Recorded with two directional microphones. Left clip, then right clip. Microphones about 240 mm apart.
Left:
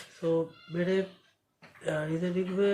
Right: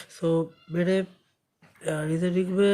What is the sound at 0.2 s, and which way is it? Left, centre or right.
Speech, right.